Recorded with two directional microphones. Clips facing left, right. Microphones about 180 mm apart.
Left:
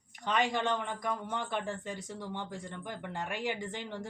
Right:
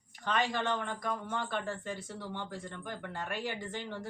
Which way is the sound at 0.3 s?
20° left (ahead or behind).